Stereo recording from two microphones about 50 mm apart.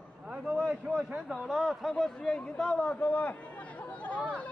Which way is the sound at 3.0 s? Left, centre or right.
Left.